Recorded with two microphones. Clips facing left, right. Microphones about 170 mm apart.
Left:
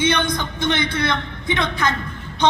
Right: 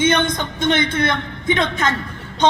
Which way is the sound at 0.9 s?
50° right (ahead or behind).